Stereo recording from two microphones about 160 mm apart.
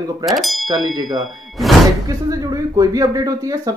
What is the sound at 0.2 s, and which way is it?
Speech, centre (ahead or behind).